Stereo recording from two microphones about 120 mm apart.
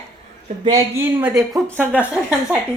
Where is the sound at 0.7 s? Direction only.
25° right (ahead or behind).